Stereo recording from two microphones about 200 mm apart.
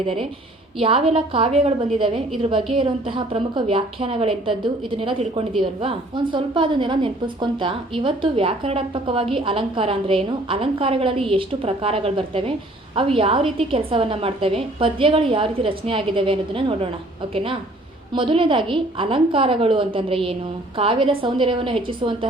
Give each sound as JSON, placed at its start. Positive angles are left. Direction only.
{"t": 0.8, "sound": "a woman's voice", "side_deg": -25}